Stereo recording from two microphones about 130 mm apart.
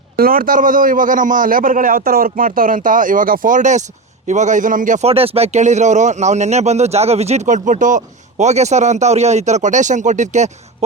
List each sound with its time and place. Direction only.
0.3 s a man's voice: 90° right
5.0 s a man's voice: 50° right (ahead or behind); by 10.8 s 65° right (ahead or behind)